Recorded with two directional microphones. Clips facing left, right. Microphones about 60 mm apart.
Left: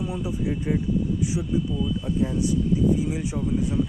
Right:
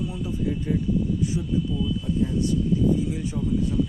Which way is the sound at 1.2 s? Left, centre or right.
Centre.